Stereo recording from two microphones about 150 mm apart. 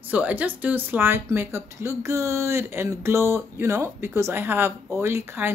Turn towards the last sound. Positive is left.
turn(degrees=-15)  # may be behind; listen again after turning